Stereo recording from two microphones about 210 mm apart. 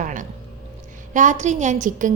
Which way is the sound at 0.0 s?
40° right (ahead or behind).